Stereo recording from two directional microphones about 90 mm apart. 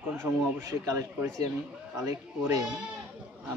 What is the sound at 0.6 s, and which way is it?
A man's voice, 40° right (ahead or behind).